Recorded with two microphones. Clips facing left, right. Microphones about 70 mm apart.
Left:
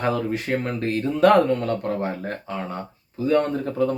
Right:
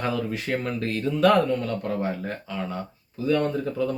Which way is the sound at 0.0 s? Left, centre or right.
Left.